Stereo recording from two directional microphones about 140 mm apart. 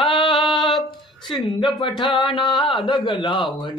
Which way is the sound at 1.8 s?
30° left (ahead or behind).